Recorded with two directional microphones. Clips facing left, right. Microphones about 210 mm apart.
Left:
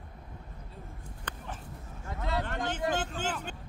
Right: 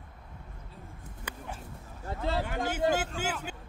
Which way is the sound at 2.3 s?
5° right (ahead or behind).